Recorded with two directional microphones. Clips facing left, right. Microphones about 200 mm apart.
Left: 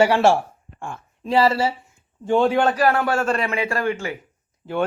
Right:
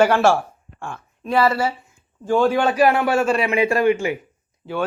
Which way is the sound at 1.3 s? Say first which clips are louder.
Even; 30° left (ahead or behind).